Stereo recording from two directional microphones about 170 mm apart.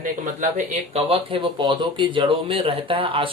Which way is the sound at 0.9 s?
30° right (ahead or behind).